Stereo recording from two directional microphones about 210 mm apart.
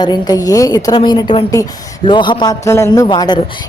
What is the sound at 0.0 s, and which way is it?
A woman's voice, 20° left (ahead or behind).